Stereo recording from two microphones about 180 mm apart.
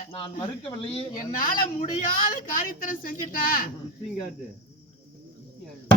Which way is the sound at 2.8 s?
50° left (ahead or behind).